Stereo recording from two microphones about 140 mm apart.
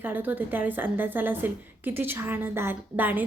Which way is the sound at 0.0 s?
15° right (ahead or behind).